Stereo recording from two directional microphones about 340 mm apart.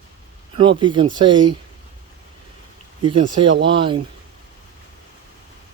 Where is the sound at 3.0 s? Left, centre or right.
Centre.